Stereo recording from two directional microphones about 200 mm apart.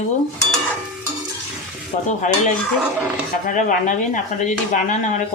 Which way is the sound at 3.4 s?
40° left (ahead or behind).